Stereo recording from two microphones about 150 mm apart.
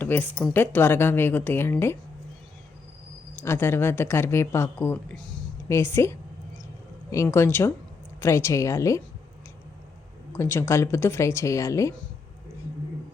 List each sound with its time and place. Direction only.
0.0 s a woman's voice: 10° left (ahead or behind)
3.4 s speech: 15° left (ahead or behind)
10.3 s speech: 20° left (ahead or behind)